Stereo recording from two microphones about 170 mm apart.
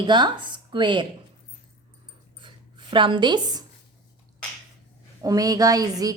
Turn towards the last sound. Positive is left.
turn(degrees=-20)  # may be behind; listen again after turning